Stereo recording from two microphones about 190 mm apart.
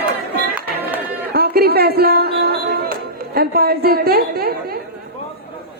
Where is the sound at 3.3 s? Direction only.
55° right (ahead or behind).